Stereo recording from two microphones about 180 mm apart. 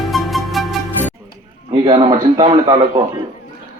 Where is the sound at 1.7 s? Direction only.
30° right (ahead or behind).